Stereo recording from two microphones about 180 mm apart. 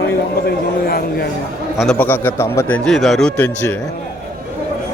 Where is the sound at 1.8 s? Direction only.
5° left (ahead or behind).